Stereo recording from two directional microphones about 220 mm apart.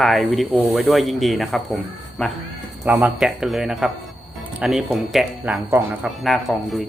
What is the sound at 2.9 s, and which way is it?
Speech, 10° right (ahead or behind).